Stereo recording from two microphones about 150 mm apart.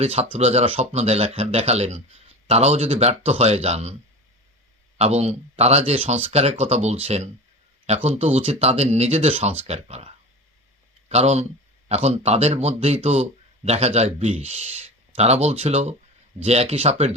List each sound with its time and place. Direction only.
0.0 s speech: 45° right (ahead or behind)
4.9 s speech: 45° right (ahead or behind)
11.1 s speech: 45° right (ahead or behind)